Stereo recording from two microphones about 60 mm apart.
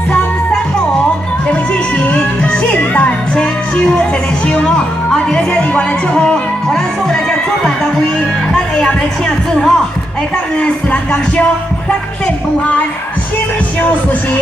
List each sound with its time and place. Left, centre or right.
2.1 s music: centre
10.6 s music: left